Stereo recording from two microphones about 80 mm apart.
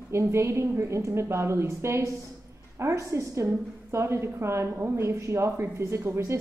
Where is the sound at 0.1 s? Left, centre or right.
Right.